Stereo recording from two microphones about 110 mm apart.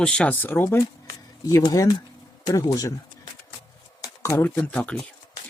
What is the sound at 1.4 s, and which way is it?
Speech, 35° left (ahead or behind).